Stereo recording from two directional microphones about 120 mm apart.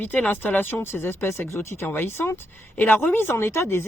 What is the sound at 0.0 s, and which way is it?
Speech, 15° left (ahead or behind).